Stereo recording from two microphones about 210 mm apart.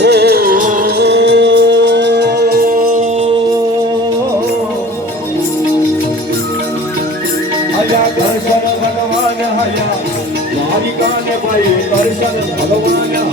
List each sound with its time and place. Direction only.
0.0 s music: 50° right (ahead or behind)